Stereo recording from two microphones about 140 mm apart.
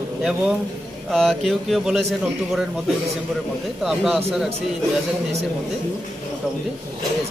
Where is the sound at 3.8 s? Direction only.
Centre (ahead or behind).